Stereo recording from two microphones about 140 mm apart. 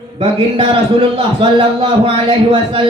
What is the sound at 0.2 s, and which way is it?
A man's voice, 40° right (ahead or behind).